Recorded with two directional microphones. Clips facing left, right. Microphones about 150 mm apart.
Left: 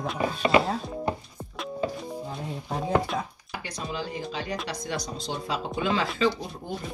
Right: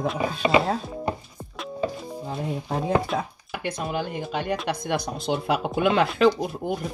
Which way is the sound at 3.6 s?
60° right (ahead or behind).